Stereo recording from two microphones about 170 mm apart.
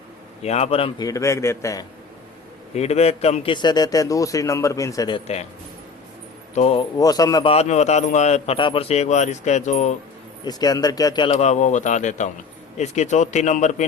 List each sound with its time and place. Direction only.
0.4 s a man's voice: 40° left (ahead or behind)
0.9 s a man's voice: 20° left (ahead or behind)
2.7 s a man's voice: 40° left (ahead or behind); by 5.2 s 25° left (ahead or behind)
6.5 s speech: 35° left (ahead or behind)
7.0 s a man's voice: 20° left (ahead or behind)
7.5 s a man's voice: 40° left (ahead or behind)
10.4 s a man's voice: 25° left (ahead or behind)
11.3 s a man's voice: 45° left (ahead or behind)